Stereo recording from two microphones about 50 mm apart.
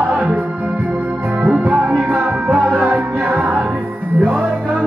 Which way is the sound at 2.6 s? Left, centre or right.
Right.